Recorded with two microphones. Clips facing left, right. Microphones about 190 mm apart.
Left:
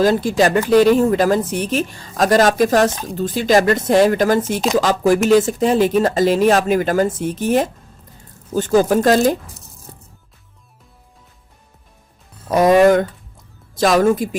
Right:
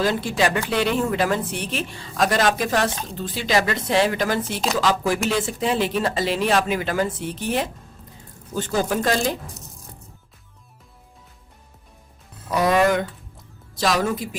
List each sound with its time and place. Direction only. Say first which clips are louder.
0.0 s speech: left 7 dB; 40° left (ahead or behind)
12.5 s speech: left 7 dB; 45° left (ahead or behind)